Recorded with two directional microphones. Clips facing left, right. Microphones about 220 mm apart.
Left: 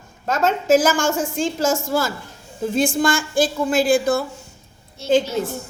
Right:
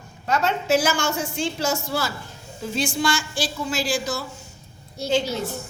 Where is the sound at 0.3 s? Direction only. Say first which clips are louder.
Left 5 dB; 50° left (ahead or behind).